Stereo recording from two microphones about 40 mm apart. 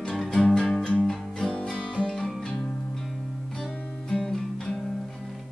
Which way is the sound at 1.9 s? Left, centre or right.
Centre.